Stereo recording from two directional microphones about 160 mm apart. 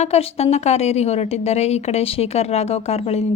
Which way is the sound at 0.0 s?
40° left (ahead or behind).